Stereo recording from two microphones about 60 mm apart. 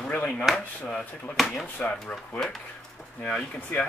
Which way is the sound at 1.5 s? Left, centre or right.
Left.